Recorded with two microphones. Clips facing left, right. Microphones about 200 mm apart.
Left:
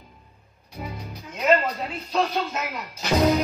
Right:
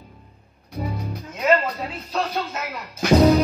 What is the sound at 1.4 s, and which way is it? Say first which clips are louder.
Speech: right 1 dB; centre (ahead or behind).